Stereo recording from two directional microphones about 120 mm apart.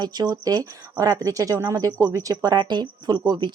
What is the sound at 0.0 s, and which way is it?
A woman's voice, 35° right (ahead or behind).